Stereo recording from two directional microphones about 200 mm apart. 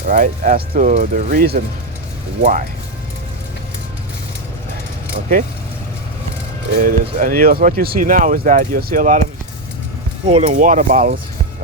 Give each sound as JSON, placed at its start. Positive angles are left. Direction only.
{"t": 0.1, "sound": "speech", "side_deg": -40}
{"t": 6.7, "sound": "speech", "side_deg": -45}
{"t": 10.2, "sound": "speech", "side_deg": -35}